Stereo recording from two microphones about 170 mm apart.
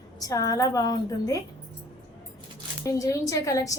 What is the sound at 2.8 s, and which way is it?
Speech, 20° left (ahead or behind).